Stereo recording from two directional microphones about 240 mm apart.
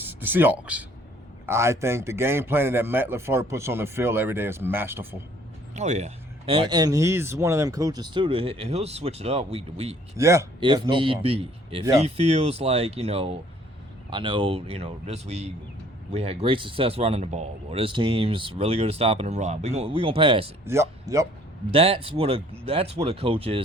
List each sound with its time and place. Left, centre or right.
0.0 s speech: centre
5.7 s speech: right
10.2 s speech: centre
21.7 s speech: right